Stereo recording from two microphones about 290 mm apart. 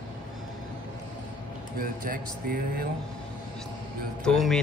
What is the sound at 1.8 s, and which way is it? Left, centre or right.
Speech, right.